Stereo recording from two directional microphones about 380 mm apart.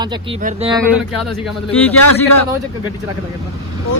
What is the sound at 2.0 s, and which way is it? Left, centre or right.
Speech, left.